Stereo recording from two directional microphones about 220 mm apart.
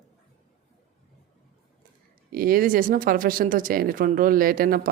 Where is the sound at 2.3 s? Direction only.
40° right (ahead or behind).